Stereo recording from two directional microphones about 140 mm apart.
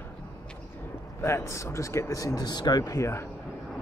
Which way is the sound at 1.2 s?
20° left (ahead or behind).